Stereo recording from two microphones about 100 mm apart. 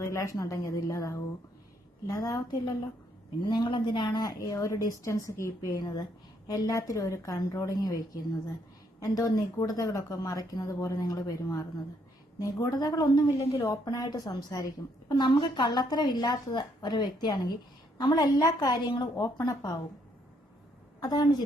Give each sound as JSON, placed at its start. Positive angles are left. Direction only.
{"t": 0.0, "sound": "a woman's voice", "side_deg": 30}
{"t": 3.4, "sound": "a woman's voice", "side_deg": 50}
{"t": 15.1, "sound": "a woman's voice", "side_deg": 50}
{"t": 21.0, "sound": "a woman's voice", "side_deg": 40}